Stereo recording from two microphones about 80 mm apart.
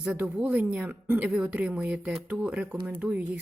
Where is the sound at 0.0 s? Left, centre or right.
Right.